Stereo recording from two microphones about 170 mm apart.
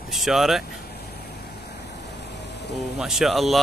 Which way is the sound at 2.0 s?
90° left.